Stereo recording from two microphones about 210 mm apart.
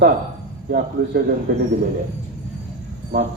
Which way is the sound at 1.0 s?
55° right (ahead or behind).